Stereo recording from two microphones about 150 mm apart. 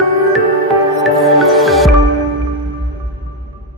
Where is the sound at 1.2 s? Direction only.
Centre (ahead or behind).